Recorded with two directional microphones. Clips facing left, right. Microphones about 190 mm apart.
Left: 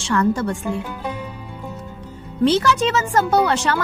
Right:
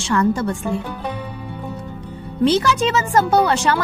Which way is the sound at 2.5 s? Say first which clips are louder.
Even; 10° right (ahead or behind).